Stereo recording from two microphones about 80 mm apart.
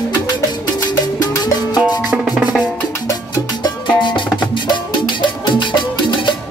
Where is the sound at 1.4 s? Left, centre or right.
Left.